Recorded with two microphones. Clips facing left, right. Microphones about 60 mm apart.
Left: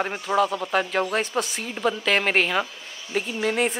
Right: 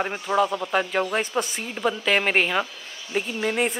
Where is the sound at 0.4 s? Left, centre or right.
Centre.